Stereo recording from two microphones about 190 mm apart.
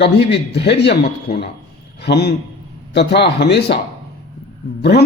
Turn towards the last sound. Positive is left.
turn(degrees=60)  # may be behind; listen again after turning